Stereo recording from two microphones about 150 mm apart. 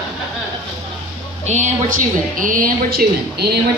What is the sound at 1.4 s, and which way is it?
A woman's voice, 50° right (ahead or behind).